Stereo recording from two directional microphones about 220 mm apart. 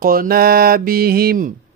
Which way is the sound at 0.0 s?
40° right (ahead or behind).